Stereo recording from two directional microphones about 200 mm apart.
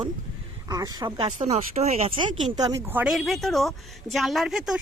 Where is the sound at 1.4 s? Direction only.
35° right (ahead or behind).